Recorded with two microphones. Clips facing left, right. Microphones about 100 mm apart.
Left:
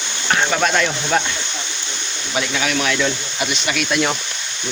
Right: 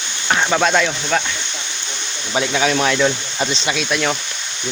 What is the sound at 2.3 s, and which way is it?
Speech, 20° right (ahead or behind).